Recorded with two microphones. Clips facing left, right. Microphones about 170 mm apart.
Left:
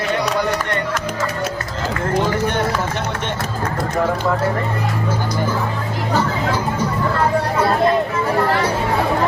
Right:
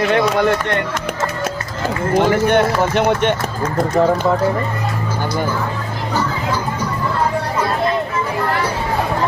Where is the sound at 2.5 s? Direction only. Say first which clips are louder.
Right 6 dB; 65° right (ahead or behind).